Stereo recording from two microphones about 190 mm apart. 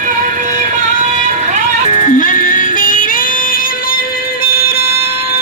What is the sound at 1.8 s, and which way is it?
Music, 40° left (ahead or behind).